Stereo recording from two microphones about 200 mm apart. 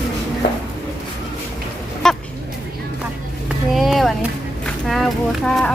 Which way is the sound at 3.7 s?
Centre (ahead or behind).